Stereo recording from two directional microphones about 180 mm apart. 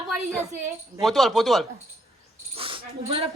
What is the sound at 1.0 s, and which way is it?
Speech, centre (ahead or behind).